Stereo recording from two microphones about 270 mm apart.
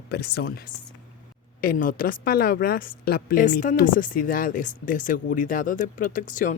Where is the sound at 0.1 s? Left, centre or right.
Left.